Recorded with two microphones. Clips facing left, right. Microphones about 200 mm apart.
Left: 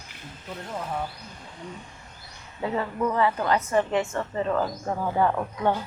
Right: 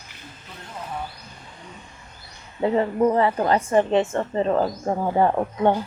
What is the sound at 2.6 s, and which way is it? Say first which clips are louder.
A woman's voice: right 7 dB; 30° right (ahead or behind).